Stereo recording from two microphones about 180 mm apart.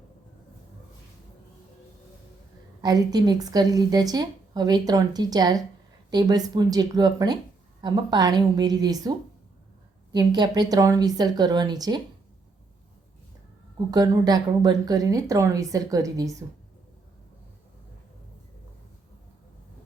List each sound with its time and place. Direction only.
2.8 s a woman's voice: 20° right (ahead or behind)
13.9 s a woman's voice: 20° right (ahead or behind)